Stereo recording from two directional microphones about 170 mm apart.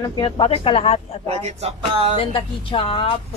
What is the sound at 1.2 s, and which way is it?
Speech, 35° right (ahead or behind).